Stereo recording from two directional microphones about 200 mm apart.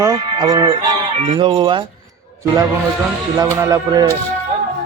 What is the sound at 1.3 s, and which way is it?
Speech, 25° right (ahead or behind).